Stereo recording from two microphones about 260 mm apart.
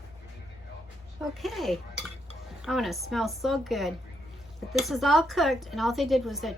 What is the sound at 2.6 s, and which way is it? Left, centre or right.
Speech, centre.